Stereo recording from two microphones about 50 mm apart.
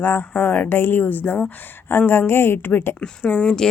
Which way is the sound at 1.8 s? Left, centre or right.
Left.